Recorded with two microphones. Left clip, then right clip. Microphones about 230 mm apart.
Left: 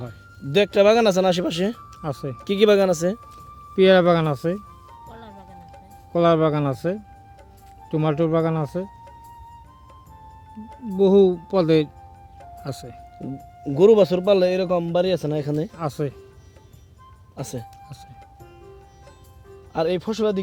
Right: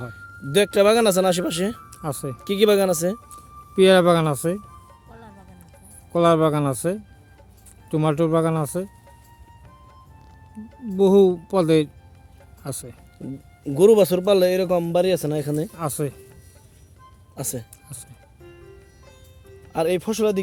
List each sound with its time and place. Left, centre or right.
0.0 s speech: centre
6.1 s speech: centre
10.8 s speech: centre
17.3 s music: centre
19.7 s speech: centre